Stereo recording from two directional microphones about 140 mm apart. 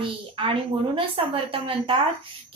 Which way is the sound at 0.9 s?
40° right (ahead or behind).